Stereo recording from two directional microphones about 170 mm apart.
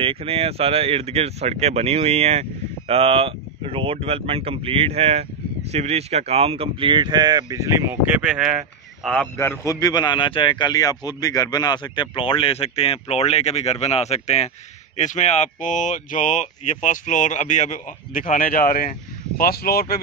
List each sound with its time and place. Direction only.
0.0 s speech: 35° right (ahead or behind); by 9.3 s centre (ahead or behind)
9.4 s a man's voice: 15° left (ahead or behind); by 20.0 s 65° left (ahead or behind)